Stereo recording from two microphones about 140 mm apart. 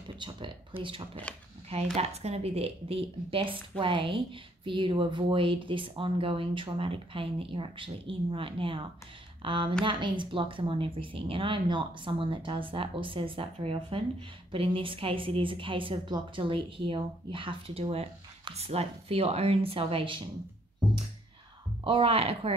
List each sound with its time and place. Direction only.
0.2 s a woman's voice: 35° right (ahead or behind)
21.8 s speech: 40° right (ahead or behind)